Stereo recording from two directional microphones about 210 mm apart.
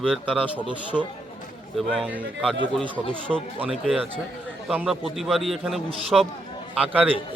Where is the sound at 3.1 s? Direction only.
5° left (ahead or behind).